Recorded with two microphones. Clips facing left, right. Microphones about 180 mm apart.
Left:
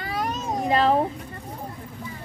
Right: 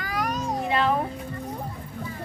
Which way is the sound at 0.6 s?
40° left (ahead or behind).